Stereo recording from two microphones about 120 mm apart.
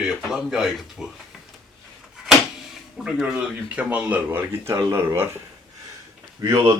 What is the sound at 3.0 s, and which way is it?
Speech, 5° right (ahead or behind).